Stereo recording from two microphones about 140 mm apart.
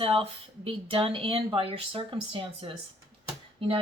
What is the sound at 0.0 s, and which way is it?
A woman's voice, 40° right (ahead or behind).